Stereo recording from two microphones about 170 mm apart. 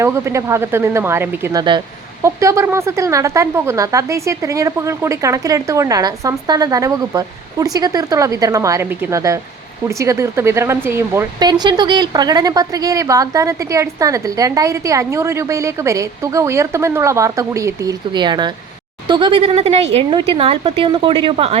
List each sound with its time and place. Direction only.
0.0 s a woman's voice: 15° right (ahead or behind); by 21.6 s 35° right (ahead or behind)